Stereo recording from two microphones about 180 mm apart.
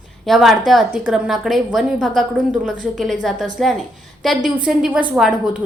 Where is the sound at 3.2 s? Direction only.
Centre (ahead or behind).